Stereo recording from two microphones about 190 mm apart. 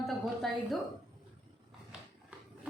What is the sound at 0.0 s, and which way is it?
Music, centre (ahead or behind).